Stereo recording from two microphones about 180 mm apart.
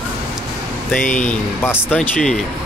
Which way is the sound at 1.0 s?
45° left (ahead or behind).